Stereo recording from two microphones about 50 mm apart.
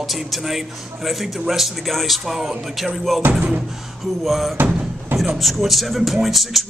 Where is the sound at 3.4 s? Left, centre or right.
Right.